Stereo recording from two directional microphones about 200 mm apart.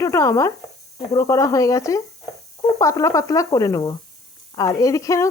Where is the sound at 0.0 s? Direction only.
15° left (ahead or behind).